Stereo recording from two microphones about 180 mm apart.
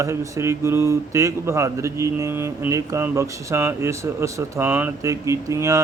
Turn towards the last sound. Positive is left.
turn(degrees=-15)  # may be behind; listen again after turning